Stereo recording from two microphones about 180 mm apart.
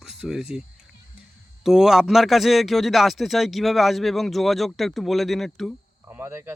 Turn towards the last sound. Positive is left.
turn(degrees=-15)  # may be behind; listen again after turning